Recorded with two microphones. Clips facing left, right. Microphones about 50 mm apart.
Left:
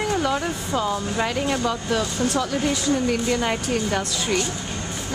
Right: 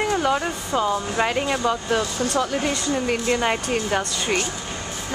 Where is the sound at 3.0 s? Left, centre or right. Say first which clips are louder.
Right 1 dB; right.